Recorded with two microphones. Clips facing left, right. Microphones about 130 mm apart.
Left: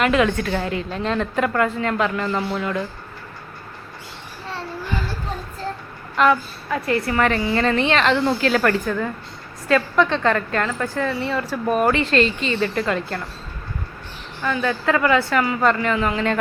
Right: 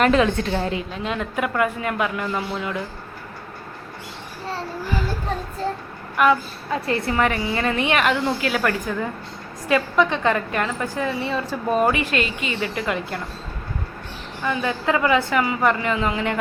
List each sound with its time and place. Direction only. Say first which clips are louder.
0.0 s a woman's voice: right 1 dB; 35° right (ahead or behind)
0.3 s a woman's voice: even; 25° right (ahead or behind)
0.9 s a woman's voice: left 4 dB; 5° right (ahead or behind)
6.2 s a woman's voice: left 1 dB; 15° right (ahead or behind)
6.7 s a woman's voice: left 1 dB; 25° right (ahead or behind)
14.4 s a woman's voice: left 1 dB; 20° right (ahead or behind)